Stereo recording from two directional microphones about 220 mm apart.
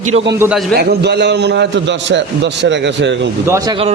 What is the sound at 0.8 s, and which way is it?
A man's voice, 50° right (ahead or behind).